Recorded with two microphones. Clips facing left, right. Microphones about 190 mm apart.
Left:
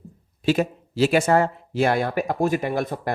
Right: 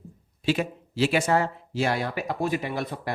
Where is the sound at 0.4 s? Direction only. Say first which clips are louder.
Left 4 dB; 45° left (ahead or behind).